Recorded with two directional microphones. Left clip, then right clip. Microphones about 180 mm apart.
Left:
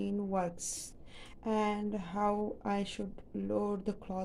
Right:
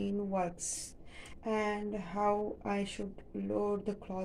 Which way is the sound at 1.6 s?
15° left (ahead or behind).